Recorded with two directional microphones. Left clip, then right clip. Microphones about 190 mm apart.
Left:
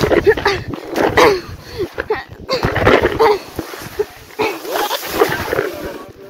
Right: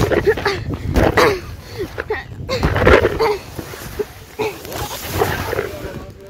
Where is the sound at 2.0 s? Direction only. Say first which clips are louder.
Left 3 dB; 20° left (ahead or behind).